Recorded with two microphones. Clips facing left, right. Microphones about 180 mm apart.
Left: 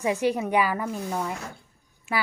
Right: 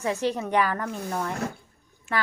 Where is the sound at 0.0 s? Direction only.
10° left (ahead or behind).